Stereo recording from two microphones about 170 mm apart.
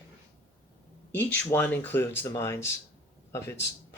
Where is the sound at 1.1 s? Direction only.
10° left (ahead or behind).